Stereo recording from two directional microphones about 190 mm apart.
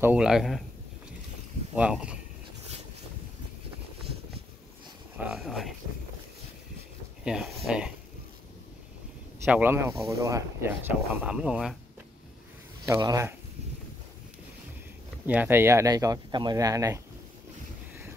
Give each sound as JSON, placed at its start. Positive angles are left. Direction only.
{"t": 0.0, "sound": "speech", "side_deg": -5}
{"t": 1.8, "sound": "speech", "side_deg": -5}
{"t": 5.1, "sound": "speech", "side_deg": -5}
{"t": 7.2, "sound": "speech", "side_deg": 0}
{"t": 9.4, "sound": "speech", "side_deg": -10}
{"t": 12.8, "sound": "speech", "side_deg": -15}
{"t": 15.2, "sound": "speech", "side_deg": -10}